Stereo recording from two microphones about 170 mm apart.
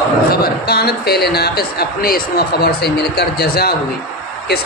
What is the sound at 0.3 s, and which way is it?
A man's voice, 65° left (ahead or behind).